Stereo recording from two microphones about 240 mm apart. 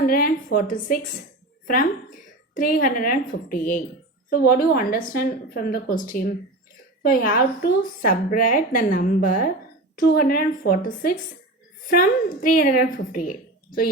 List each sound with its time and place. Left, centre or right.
0.0 s a woman's voice: left